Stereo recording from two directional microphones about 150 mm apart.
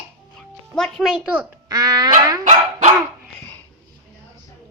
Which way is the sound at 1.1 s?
10° right (ahead or behind).